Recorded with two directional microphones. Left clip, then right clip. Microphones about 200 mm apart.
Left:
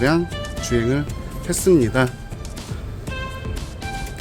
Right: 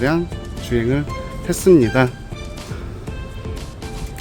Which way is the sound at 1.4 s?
25° right (ahead or behind).